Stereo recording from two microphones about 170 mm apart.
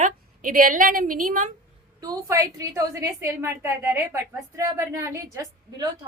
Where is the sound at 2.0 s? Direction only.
20° right (ahead or behind).